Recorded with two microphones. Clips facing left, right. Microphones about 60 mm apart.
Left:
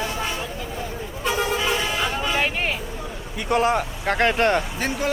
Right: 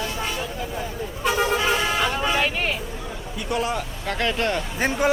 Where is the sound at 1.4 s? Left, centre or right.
Centre.